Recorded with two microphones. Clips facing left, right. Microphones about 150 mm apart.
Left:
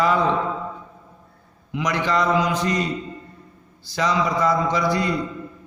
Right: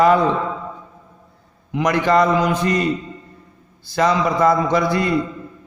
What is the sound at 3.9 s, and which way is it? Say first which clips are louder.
A man's voice: right 4 dB; 55° right (ahead or behind).